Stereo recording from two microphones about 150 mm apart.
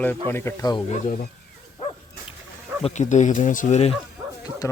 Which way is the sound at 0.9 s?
55° left (ahead or behind).